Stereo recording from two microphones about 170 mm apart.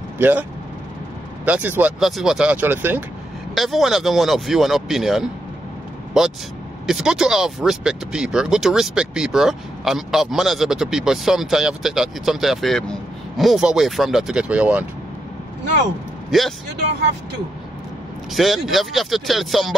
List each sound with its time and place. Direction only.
0.2 s speech: 10° right (ahead or behind)
3.5 s speech: centre (ahead or behind)
6.9 s speech: 5° right (ahead or behind)
16.3 s a man's voice: centre (ahead or behind)
18.3 s speech: centre (ahead or behind)